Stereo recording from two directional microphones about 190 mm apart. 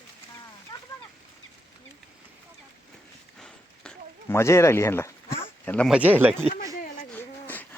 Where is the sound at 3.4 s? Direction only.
5° left (ahead or behind).